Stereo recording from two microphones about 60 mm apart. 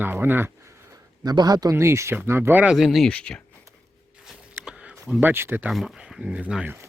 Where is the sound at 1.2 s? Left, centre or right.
Right.